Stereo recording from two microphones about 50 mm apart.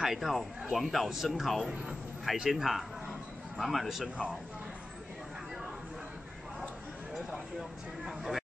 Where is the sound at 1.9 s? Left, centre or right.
Centre.